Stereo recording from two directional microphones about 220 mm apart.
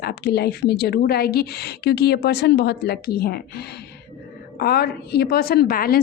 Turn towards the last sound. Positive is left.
turn(degrees=40)  # may be behind; listen again after turning